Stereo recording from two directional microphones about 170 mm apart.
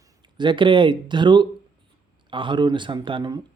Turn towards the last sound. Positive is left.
turn(degrees=-30)  # may be behind; listen again after turning